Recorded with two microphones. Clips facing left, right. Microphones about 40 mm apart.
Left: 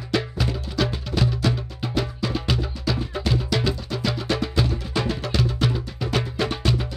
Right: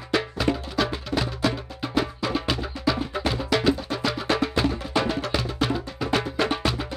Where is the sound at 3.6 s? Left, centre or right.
Centre.